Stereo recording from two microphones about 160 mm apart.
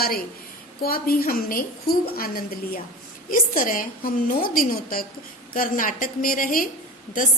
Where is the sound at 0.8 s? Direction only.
70° left (ahead or behind).